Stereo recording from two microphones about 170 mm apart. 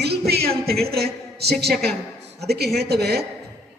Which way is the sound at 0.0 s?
70° right (ahead or behind).